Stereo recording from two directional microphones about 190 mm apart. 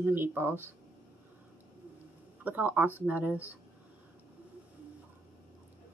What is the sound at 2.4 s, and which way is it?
Speech, 10° right (ahead or behind).